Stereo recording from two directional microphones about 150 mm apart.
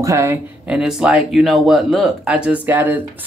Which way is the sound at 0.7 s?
5° right (ahead or behind).